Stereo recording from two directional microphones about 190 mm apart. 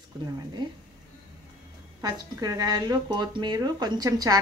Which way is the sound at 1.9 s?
20° right (ahead or behind).